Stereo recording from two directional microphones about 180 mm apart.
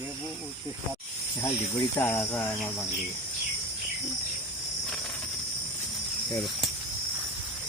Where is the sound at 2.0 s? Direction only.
15° left (ahead or behind).